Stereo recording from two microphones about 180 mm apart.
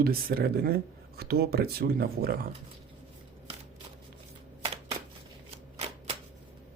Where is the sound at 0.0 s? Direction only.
55° right (ahead or behind).